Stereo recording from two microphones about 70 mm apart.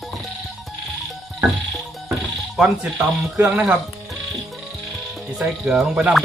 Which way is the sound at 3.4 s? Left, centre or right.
Centre.